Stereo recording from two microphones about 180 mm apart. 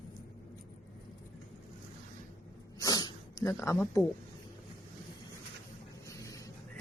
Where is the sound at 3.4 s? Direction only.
15° left (ahead or behind).